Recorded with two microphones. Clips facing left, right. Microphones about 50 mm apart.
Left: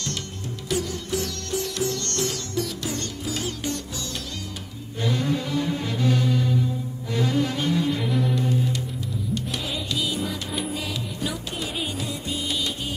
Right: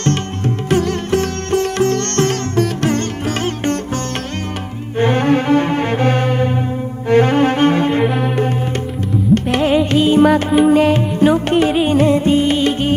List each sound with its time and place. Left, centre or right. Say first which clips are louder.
0.7 s music: right 10 dB; right
4.9 s music: right 11 dB; right
7.1 s cello: right 12 dB; right
8.1 s music: right 7 dB; right
9.3 s music: right 18 dB; right
10.5 s music: right 18 dB; right
10.8 s music: right 17 dB; right